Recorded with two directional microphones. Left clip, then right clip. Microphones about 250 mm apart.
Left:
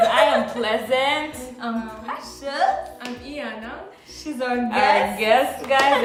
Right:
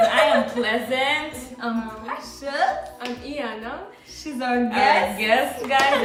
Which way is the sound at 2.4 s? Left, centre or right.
Centre.